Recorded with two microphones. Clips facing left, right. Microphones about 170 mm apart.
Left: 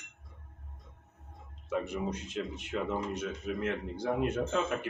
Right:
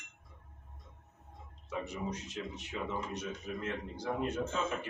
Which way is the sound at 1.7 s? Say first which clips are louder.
Left 5 dB; 55° left (ahead or behind).